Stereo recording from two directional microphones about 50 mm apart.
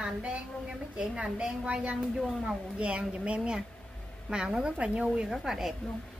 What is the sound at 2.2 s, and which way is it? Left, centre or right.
Speech, centre.